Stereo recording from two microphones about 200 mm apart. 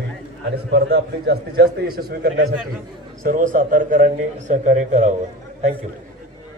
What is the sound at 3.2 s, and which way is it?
A man's voice, 40° right (ahead or behind).